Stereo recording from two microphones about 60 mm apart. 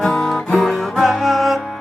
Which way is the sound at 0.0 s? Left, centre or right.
Centre.